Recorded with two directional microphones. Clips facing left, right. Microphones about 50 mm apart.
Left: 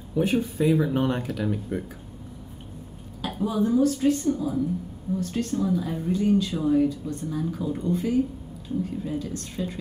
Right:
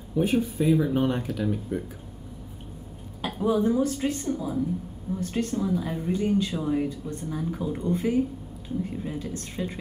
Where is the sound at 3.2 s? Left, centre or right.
Right.